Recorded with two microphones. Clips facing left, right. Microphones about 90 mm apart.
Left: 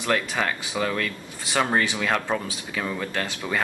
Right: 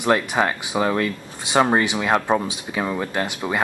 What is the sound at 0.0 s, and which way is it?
Speech, 25° right (ahead or behind).